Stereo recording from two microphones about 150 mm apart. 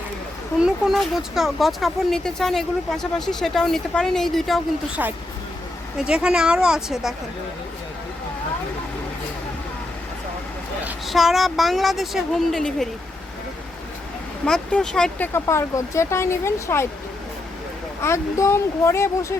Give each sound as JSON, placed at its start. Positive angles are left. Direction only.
{"t": 0.6, "sound": "speech", "side_deg": 0}
{"t": 5.0, "sound": "speech", "side_deg": -15}
{"t": 11.0, "sound": "speech", "side_deg": 0}
{"t": 14.4, "sound": "speech", "side_deg": 5}
{"t": 15.3, "sound": "speech", "side_deg": 20}
{"t": 18.0, "sound": "speech", "side_deg": 20}